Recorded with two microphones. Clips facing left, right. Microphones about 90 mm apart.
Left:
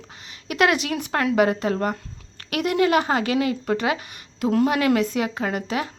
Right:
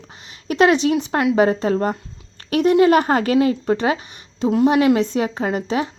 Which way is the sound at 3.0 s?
45° right (ahead or behind).